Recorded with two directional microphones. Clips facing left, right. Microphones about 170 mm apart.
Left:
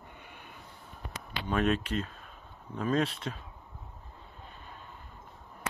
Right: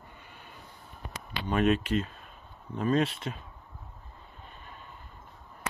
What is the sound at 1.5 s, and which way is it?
Speech, 5° right (ahead or behind).